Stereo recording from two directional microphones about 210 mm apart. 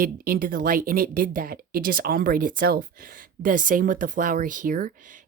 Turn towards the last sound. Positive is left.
turn(degrees=-40)  # may be behind; listen again after turning